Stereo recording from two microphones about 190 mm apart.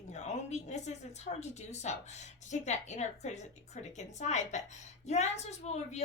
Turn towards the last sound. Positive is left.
turn(degrees=35)  # may be behind; listen again after turning